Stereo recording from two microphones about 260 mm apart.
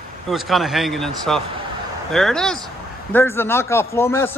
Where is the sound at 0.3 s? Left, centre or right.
Centre.